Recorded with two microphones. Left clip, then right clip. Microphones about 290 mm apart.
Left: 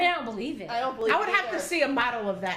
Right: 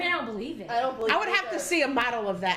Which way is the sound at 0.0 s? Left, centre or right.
Left.